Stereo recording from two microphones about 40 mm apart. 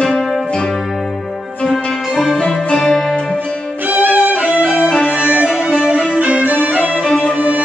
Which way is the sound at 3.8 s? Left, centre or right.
Right.